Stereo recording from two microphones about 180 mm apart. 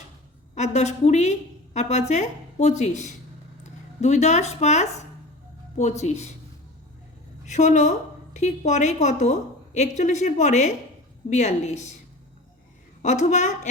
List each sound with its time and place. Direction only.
0.5 s a woman's voice: 40° left (ahead or behind)
7.4 s a woman's voice: 40° left (ahead or behind)
13.0 s a woman's voice: 40° left (ahead or behind)